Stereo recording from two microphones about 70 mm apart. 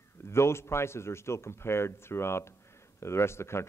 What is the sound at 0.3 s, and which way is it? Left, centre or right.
Speech, left.